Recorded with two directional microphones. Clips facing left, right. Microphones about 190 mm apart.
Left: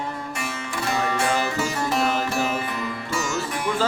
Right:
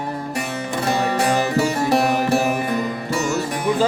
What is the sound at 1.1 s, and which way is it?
Music, 40° right (ahead or behind).